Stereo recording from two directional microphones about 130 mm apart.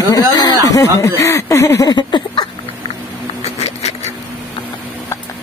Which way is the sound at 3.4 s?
55° left (ahead or behind).